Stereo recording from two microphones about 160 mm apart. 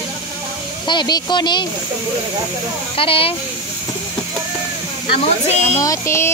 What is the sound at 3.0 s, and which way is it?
Speech, 35° left (ahead or behind).